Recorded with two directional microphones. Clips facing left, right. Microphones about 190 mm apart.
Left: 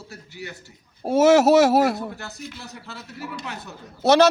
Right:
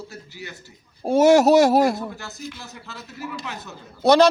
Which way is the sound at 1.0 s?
5° left (ahead or behind).